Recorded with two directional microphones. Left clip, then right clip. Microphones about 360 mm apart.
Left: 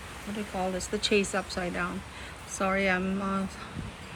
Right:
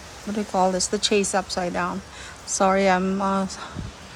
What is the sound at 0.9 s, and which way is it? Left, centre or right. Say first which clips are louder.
Speech: right 5 dB; centre.